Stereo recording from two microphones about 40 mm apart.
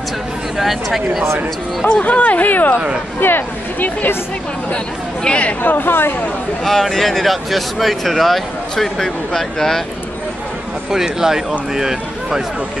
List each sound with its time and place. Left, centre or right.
0.6 s speech: centre
1.9 s speech: left
3.2 s speech: left
5.2 s speech: left
5.6 s speech: left
6.6 s speech: centre
10.9 s speech: centre